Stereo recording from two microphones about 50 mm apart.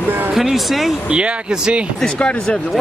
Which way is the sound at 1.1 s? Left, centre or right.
Right.